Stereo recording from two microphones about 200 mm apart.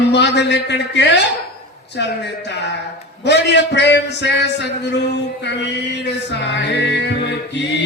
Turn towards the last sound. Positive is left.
turn(degrees=60)  # may be behind; listen again after turning